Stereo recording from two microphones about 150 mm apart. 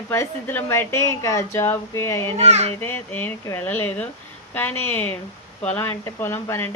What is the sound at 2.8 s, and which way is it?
Speech, 15° left (ahead or behind).